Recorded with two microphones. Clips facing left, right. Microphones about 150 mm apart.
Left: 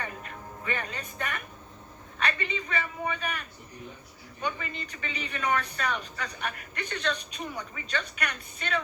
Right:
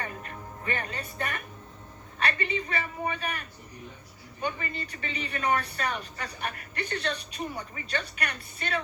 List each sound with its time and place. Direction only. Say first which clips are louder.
0.0 s music: right 1 dB; 45° right (ahead or behind)
2.1 s a man's voice: right 2 dB; 45° right (ahead or behind)
4.4 s a man's voice: right 1 dB; 45° right (ahead or behind)